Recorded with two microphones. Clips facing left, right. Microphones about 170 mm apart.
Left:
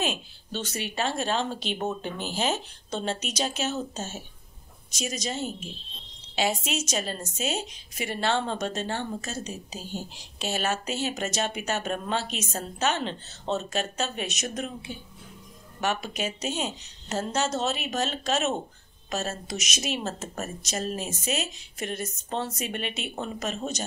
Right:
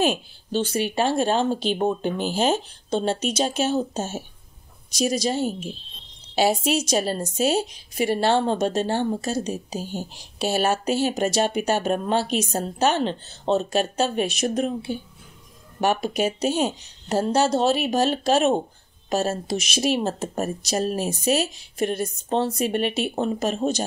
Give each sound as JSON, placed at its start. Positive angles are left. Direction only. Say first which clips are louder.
{"t": 0.5, "sound": "a woman's voice", "louder": "right 9 dB", "side_deg": -30}